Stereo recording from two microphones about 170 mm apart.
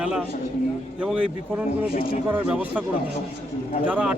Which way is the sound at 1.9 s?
60° left (ahead or behind).